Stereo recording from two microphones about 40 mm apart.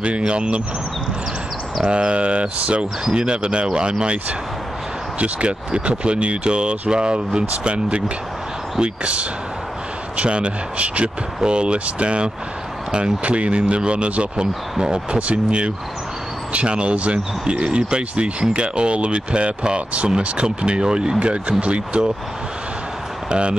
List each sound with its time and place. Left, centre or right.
0.0 s speech: right
1.9 s speech: right
5.2 s speech: right